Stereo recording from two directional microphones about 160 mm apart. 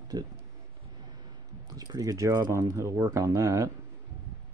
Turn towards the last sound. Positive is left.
turn(degrees=-20)  # may be behind; listen again after turning